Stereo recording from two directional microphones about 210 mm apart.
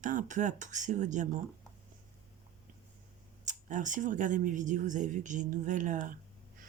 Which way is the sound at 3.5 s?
35° right (ahead or behind).